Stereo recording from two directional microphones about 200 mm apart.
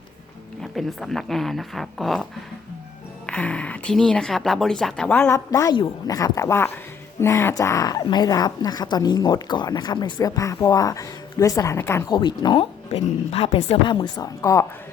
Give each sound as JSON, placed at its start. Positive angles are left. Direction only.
{"t": 0.6, "sound": "speech", "side_deg": 0}
{"t": 3.2, "sound": "a woman's voice", "side_deg": 5}